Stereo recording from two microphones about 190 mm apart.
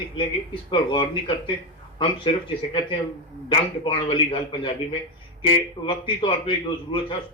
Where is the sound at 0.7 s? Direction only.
25° left (ahead or behind).